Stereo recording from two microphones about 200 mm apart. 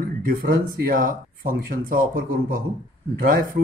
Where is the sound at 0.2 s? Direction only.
45° right (ahead or behind).